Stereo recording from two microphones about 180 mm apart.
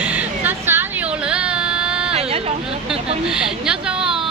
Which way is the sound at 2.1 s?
35° right (ahead or behind).